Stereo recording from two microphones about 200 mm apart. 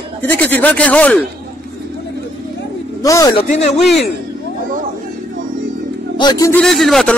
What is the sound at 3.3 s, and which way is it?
Speech, 35° left (ahead or behind).